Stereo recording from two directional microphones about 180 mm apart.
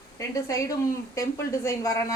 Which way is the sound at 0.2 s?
15° left (ahead or behind).